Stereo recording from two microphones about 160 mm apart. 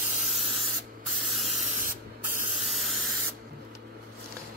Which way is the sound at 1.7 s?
55° right (ahead or behind).